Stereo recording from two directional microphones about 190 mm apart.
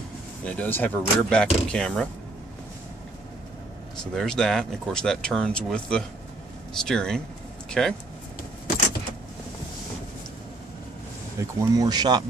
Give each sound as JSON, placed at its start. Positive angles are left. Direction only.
{"t": 0.4, "sound": "speech", "side_deg": 5}
{"t": 4.0, "sound": "speech", "side_deg": 0}
{"t": 11.3, "sound": "speech", "side_deg": -15}